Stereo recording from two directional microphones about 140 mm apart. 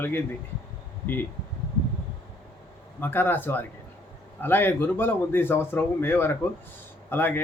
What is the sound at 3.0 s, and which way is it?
Speech, 15° left (ahead or behind).